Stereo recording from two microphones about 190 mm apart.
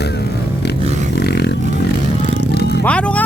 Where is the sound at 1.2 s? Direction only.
60° left (ahead or behind).